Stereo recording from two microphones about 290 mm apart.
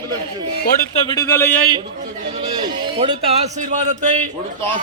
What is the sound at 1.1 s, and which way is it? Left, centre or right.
Speech, centre.